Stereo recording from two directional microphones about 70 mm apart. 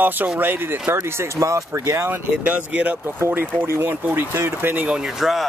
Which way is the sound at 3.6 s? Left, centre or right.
Right.